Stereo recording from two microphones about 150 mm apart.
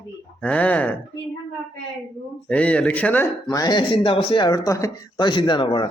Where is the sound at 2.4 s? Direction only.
10° left (ahead or behind).